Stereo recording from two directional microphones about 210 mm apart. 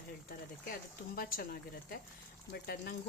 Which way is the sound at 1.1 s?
45° left (ahead or behind).